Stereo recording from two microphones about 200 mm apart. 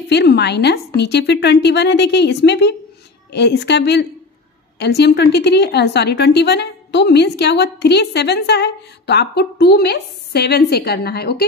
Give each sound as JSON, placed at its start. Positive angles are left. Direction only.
{"t": 0.1, "sound": "a woman's voice", "side_deg": 55}